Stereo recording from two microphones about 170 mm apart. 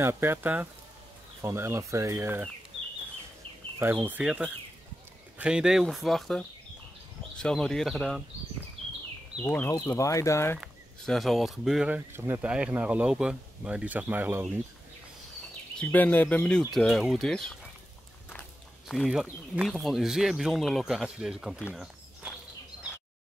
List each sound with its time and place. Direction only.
0.0 s speech: 15° right (ahead or behind)
3.8 s speech: 10° right (ahead or behind)
7.4 s speech: centre (ahead or behind)
9.4 s speech: 10° left (ahead or behind)
10.6 s speech: centre (ahead or behind)
15.8 s speech: 10° left (ahead or behind)
18.9 s speech: centre (ahead or behind)
22.2 s a sound: 5° right (ahead or behind)